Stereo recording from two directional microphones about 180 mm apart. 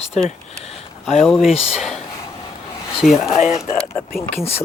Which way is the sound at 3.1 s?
35° left (ahead or behind).